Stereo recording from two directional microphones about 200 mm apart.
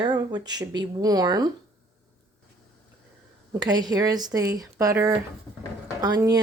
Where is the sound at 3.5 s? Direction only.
20° right (ahead or behind).